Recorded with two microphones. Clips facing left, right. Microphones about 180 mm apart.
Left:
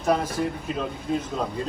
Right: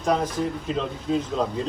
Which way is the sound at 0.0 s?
5° left (ahead or behind).